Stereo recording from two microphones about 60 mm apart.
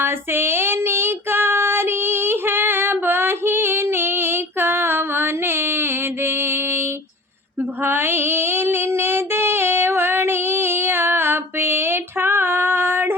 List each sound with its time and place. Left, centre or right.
0.0 s child singing: right
7.9 s female singing: right